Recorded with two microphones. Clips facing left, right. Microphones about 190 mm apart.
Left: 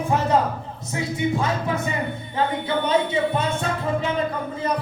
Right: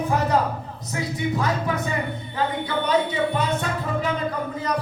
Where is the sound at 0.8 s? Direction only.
25° left (ahead or behind).